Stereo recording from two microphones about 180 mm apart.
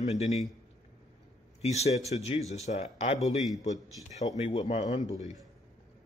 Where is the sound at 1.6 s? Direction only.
35° left (ahead or behind).